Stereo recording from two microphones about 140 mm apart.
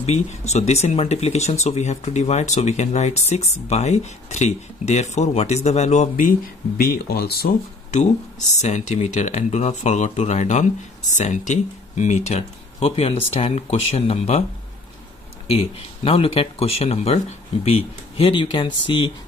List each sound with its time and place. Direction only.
0.0 s speech: 55° left (ahead or behind)
6.8 s speech: 90° left; by 8.1 s 75° left (ahead or behind)
8.5 s speech: 55° left (ahead or behind)
15.5 s speech: 45° left (ahead or behind)